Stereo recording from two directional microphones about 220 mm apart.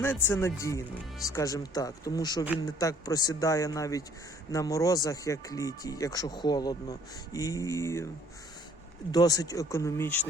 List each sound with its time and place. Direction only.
0.0 s speech: 10° left (ahead or behind)
9.1 s speech: 15° left (ahead or behind)